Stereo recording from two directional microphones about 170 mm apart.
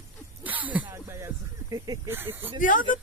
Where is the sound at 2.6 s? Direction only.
50° left (ahead or behind).